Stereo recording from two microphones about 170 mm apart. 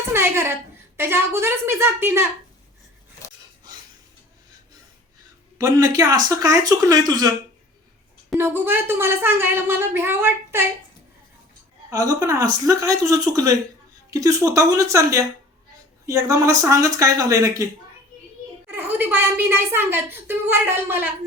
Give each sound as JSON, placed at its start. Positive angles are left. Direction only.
{"t": 0.1, "sound": "a sound", "side_deg": -15}
{"t": 0.9, "sound": "a woman's voice", "side_deg": -15}
{"t": 5.5, "sound": "speech", "side_deg": -20}
{"t": 8.4, "sound": "a woman's voice", "side_deg": -10}
{"t": 11.9, "sound": "speech", "side_deg": -20}
{"t": 18.7, "sound": "a woman's voice", "side_deg": -10}